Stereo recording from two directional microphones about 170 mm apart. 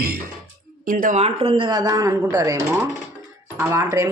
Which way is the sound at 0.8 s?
50° right (ahead or behind).